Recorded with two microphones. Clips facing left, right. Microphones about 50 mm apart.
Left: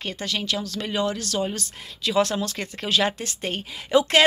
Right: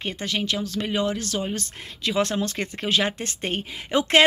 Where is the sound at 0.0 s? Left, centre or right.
Right.